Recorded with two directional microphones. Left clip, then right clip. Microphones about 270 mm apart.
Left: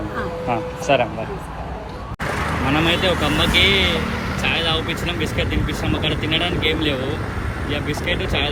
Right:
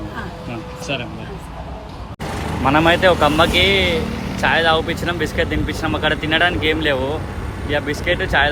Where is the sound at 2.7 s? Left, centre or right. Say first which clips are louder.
Right 6 dB; centre.